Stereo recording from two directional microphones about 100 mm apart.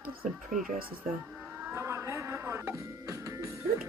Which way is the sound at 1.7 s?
25° right (ahead or behind).